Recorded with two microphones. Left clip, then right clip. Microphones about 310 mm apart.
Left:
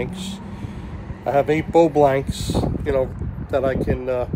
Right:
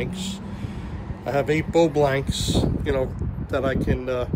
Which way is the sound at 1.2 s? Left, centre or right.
Centre.